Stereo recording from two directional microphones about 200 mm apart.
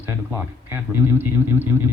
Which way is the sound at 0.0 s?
10° right (ahead or behind).